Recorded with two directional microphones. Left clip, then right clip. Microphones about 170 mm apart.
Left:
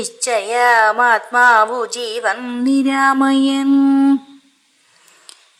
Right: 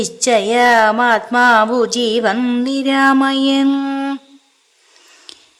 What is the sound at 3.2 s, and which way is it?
Speech, 5° right (ahead or behind).